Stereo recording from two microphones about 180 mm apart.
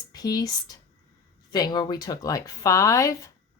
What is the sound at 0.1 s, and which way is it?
Speech, 20° left (ahead or behind).